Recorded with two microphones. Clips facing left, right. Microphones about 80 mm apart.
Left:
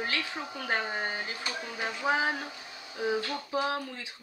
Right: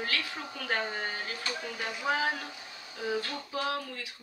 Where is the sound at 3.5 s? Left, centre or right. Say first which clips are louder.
Left 2 dB; left.